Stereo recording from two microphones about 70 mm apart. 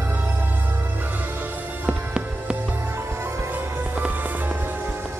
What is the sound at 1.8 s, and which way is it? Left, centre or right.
Music, centre.